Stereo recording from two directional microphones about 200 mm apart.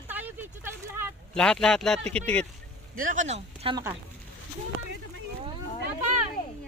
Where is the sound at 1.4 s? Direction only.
5° left (ahead or behind).